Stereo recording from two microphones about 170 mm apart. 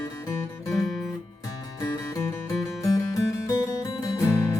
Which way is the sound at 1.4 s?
20° left (ahead or behind).